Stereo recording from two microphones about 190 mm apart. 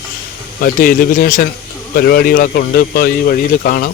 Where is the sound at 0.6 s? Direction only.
50° left (ahead or behind).